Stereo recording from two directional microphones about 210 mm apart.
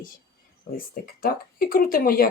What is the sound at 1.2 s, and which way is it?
Speech, 45° left (ahead or behind).